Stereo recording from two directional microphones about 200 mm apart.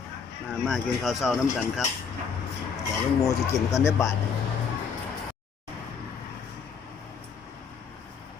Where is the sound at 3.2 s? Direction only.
15° left (ahead or behind).